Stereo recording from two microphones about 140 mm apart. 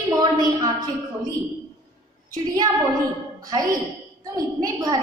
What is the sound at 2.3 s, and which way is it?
Speech, 30° right (ahead or behind).